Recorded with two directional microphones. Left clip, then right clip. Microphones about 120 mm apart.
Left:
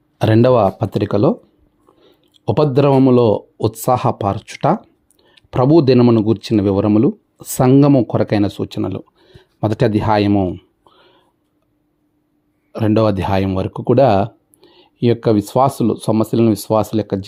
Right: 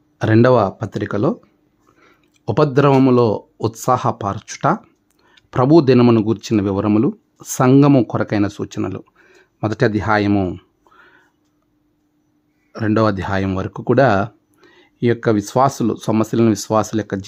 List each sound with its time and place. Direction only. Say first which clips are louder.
0.4 s speech: left 2 dB; 20° left (ahead or behind)
5.2 s a sound: left 1 dB; 10° left (ahead or behind)
6.1 s speech: left 2 dB; 10° left (ahead or behind)
10.3 s speech: left 2 dB; 5° right (ahead or behind)
10.8 s whispering: right 2 dB; 10° left (ahead or behind)
12.7 s speech: left 2 dB; 15° left (ahead or behind)